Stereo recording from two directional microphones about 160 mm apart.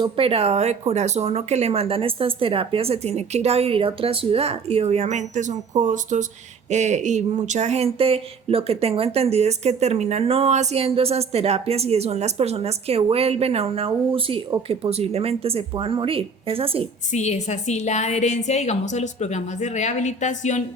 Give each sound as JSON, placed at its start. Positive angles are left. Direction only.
{"t": 0.0, "sound": "speech", "side_deg": -35}
{"t": 17.1, "sound": "a woman's voice", "side_deg": 45}